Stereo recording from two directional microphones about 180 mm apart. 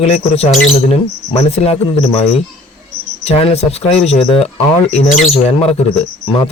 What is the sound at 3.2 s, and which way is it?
A man's voice, 35° left (ahead or behind).